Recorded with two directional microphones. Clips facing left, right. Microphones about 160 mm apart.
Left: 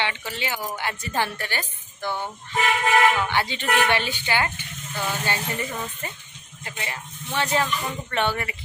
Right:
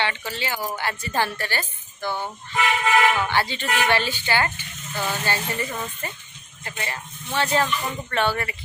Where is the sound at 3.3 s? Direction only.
15° left (ahead or behind).